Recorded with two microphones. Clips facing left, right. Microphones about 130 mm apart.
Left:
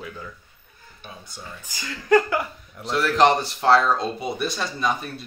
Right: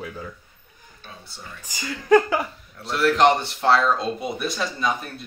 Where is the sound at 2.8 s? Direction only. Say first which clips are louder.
Right 1 dB; centre (ahead or behind).